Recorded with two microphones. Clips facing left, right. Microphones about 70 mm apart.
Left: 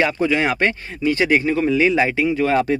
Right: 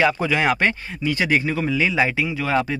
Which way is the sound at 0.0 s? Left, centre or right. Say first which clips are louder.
Left 1 dB; centre.